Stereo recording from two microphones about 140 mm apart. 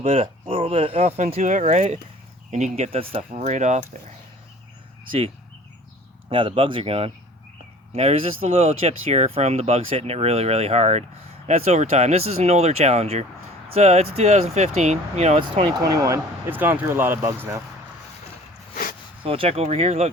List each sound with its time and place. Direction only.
0.0 s speech: 45° right (ahead or behind)
5.0 s speech: 40° right (ahead or behind)
15.8 s speech: 25° right (ahead or behind)
19.2 s speech: 40° right (ahead or behind)